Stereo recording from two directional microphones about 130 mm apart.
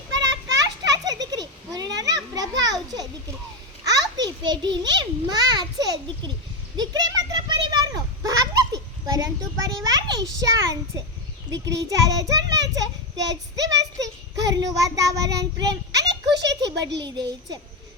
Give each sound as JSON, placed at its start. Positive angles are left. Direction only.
{"t": 0.3, "sound": "children playing", "side_deg": -30}
{"t": 3.8, "sound": "a child's voice", "side_deg": -30}
{"t": 6.7, "sound": "children playing", "side_deg": -30}
{"t": 11.4, "sound": "a child's voice", "side_deg": -25}